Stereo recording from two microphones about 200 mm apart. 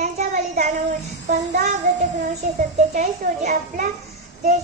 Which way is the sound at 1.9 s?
40° right (ahead or behind).